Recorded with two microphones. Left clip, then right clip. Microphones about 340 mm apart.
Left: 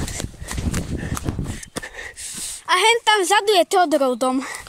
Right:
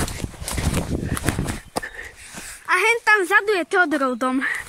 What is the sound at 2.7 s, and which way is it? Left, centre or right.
Speech, centre.